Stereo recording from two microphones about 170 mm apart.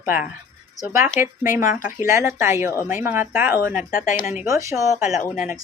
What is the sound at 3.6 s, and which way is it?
Speech, 55° left (ahead or behind).